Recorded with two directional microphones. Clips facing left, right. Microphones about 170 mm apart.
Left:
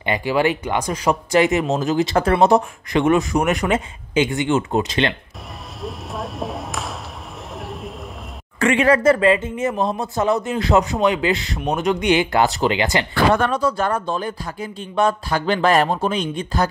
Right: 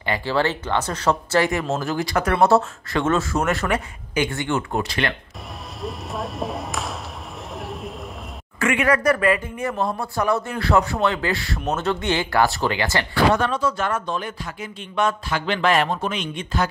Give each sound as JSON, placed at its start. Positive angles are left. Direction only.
{"t": 0.0, "sound": "speech", "side_deg": 15}
{"t": 5.8, "sound": "a sound", "side_deg": 0}
{"t": 8.5, "sound": "speech", "side_deg": 30}
{"t": 13.1, "sound": "speech", "side_deg": 50}
{"t": 13.6, "sound": "speech", "side_deg": 35}